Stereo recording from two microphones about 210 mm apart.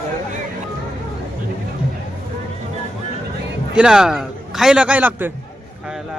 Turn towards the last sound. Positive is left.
turn(degrees=-10)  # may be behind; listen again after turning